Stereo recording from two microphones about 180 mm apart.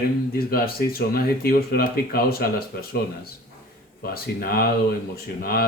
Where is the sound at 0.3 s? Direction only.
55° left (ahead or behind).